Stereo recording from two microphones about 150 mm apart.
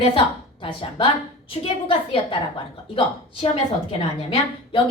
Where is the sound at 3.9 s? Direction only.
40° left (ahead or behind).